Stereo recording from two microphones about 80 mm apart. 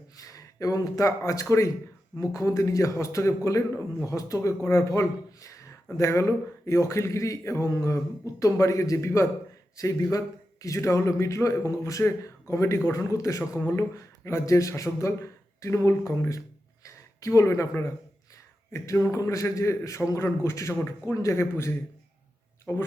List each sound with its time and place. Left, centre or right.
0.2 s a man's voice: left